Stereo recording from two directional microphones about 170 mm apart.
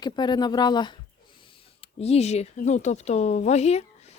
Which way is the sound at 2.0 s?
40° left (ahead or behind).